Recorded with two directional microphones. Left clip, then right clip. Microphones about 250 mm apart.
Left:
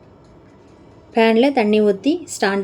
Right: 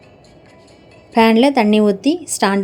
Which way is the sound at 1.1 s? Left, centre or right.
Right.